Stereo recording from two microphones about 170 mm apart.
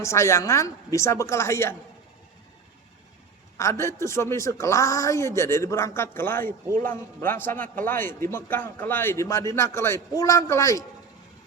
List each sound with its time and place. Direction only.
0.0 s a man's voice: 15° left (ahead or behind)
3.6 s a man's voice: 15° left (ahead or behind)